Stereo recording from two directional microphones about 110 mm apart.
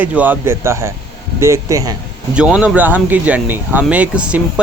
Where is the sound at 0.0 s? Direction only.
15° right (ahead or behind).